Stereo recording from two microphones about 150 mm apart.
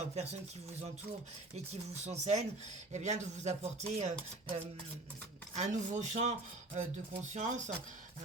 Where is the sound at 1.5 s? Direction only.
50° right (ahead or behind).